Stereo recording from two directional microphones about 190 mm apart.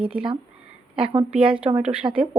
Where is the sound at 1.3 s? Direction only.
5° right (ahead or behind).